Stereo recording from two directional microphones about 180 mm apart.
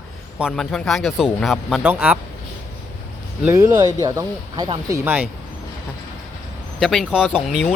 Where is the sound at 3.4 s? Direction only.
15° right (ahead or behind).